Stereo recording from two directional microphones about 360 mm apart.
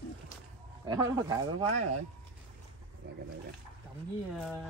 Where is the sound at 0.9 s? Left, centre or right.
Centre.